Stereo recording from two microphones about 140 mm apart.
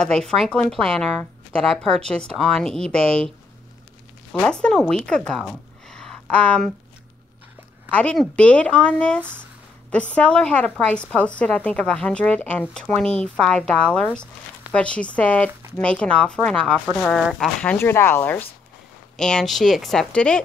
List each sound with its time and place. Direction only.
0.0 s a woman's voice: 5° left (ahead or behind)
4.3 s a woman's voice: 5° left (ahead or behind)
5.4 s a sound: 5° left (ahead or behind)
7.9 s a woman's voice: 5° left (ahead or behind)
17.7 s a woman's voice: 15° left (ahead or behind)